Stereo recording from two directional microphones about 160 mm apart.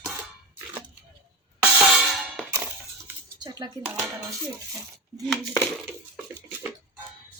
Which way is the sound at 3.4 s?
25° right (ahead or behind).